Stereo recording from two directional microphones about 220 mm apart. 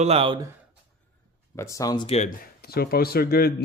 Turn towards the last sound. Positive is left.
turn(degrees=45)  # may be behind; listen again after turning